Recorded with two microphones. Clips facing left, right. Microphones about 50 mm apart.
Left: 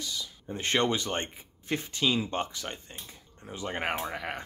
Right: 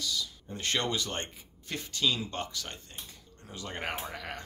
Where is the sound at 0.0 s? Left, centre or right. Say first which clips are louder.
Right 2 dB; left.